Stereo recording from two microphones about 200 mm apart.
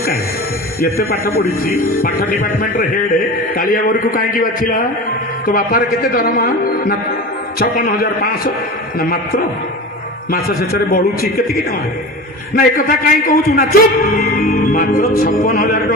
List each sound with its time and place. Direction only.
1.4 s a man's voice: 45° left (ahead or behind)
12.5 s a man's voice: 45° left (ahead or behind)